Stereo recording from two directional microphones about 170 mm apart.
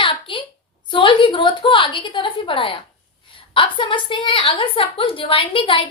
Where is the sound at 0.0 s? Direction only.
30° left (ahead or behind).